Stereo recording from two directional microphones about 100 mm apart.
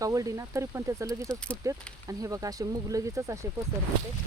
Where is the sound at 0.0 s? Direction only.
35° right (ahead or behind).